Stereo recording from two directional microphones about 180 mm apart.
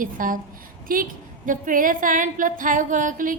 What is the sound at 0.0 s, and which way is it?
A woman's voice, 50° right (ahead or behind).